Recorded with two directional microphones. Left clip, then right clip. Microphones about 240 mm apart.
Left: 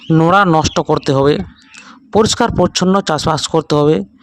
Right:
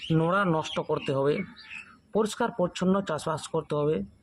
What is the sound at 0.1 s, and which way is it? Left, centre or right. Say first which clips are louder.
Speech: left 15 dB; left.